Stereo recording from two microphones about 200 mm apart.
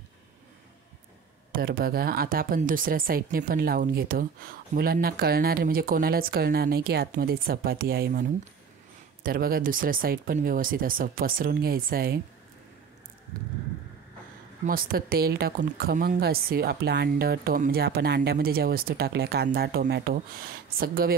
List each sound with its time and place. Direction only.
1.5 s speech: 50° right (ahead or behind)
14.7 s speech: 45° right (ahead or behind)